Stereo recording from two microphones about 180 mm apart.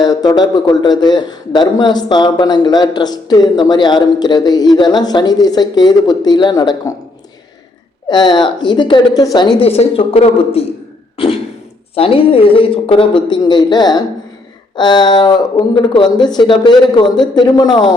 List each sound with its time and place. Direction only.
0.0 s a man's voice: 20° left (ahead or behind)
8.1 s a man's voice: 25° left (ahead or behind)
9.6 s a woman's voice: 35° left (ahead or behind)